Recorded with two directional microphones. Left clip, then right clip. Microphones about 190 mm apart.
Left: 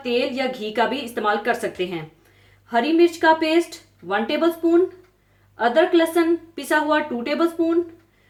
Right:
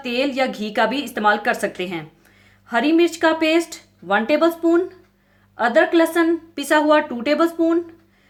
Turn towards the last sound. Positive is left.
turn(degrees=-50)  # may be behind; listen again after turning